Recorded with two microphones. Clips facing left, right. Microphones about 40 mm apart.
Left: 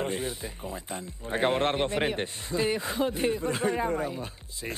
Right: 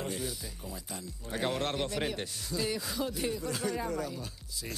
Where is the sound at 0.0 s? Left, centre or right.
Left.